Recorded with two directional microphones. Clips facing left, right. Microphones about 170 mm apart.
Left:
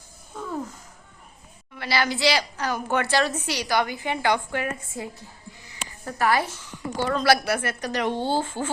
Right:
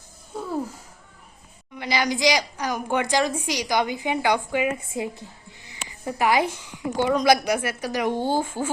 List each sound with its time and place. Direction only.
0.3 s a sound: 10° right (ahead or behind)
1.7 s a woman's voice: 15° right (ahead or behind)
6.1 s a woman's voice: 15° right (ahead or behind)